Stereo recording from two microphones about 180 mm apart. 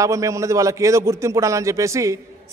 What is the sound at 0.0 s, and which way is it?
A man's voice, 15° right (ahead or behind).